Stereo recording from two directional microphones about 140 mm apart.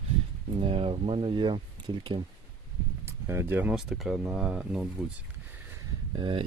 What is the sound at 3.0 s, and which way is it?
Speech, 20° right (ahead or behind).